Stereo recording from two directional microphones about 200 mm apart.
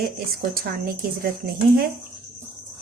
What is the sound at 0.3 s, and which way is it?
A woman's voice, 50° right (ahead or behind).